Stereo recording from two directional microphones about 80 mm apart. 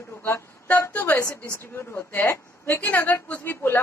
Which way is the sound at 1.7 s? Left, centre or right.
Left.